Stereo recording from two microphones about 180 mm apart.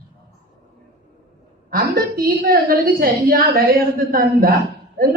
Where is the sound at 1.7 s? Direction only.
55° right (ahead or behind).